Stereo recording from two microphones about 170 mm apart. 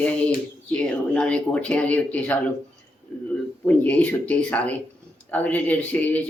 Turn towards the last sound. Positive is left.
turn(degrees=10)  # may be behind; listen again after turning